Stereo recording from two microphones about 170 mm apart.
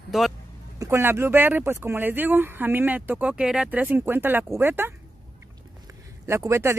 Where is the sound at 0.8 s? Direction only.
15° right (ahead or behind).